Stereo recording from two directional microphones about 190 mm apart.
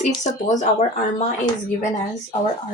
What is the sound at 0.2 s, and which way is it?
Speech, 40° left (ahead or behind).